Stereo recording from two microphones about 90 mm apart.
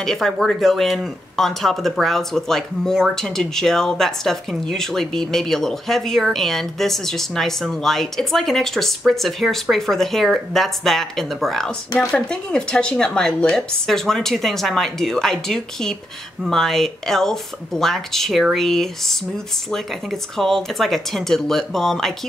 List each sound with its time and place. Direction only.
0.0 s speech: 5° left (ahead or behind)